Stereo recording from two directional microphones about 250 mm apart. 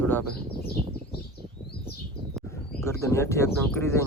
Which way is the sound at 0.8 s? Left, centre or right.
Right.